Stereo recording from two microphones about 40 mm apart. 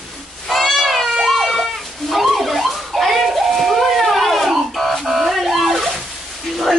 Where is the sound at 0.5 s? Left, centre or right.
Centre.